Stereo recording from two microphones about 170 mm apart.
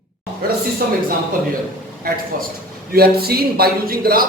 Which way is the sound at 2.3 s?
55° right (ahead or behind).